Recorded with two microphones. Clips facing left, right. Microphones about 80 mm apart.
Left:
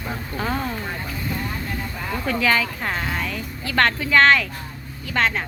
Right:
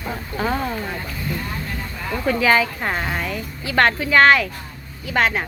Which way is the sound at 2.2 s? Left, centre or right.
Centre.